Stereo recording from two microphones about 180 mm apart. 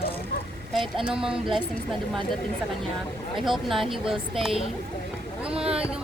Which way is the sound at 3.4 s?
Centre (ahead or behind).